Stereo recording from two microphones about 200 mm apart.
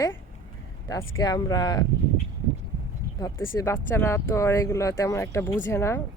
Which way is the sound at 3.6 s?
15° left (ahead or behind).